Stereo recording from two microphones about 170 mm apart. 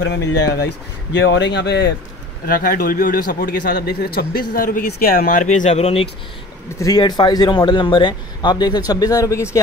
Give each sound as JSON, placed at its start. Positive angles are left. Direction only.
{"t": 0.3, "sound": "a man's voice", "side_deg": 80}
{"t": 2.4, "sound": "speech", "side_deg": 55}
{"t": 6.8, "sound": "a man's voice", "side_deg": 25}